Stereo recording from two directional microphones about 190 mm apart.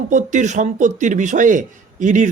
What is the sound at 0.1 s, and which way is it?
A man's voice, 40° right (ahead or behind).